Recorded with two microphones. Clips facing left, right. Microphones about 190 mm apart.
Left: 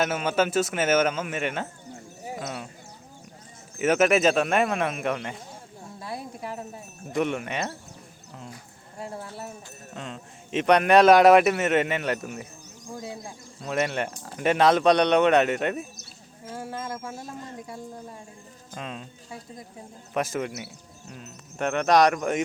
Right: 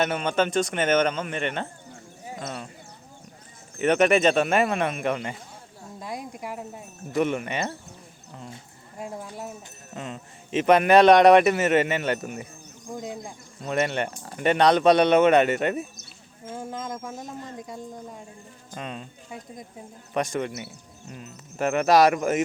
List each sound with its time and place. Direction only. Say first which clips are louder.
0.0 s a man's voice: even; 5° left (ahead or behind)
3.8 s a man's voice: right 1 dB; 5° left (ahead or behind)
6.0 s speech: right 1 dB; 15° right (ahead or behind)
7.1 s a man's voice: right 2 dB; centre (ahead or behind)
9.0 s speech: right 1 dB; 15° right (ahead or behind)
9.9 s a man's voice: right 2 dB; 5° right (ahead or behind)
12.9 s speech: right 2 dB; 15° right (ahead or behind)
13.6 s a man's voice: right 1 dB; centre (ahead or behind)
16.5 s speech: right 1 dB; 20° right (ahead or behind)
18.7 s a man's voice: right 1 dB; centre (ahead or behind)
20.1 s a man's voice: right 1 dB; centre (ahead or behind)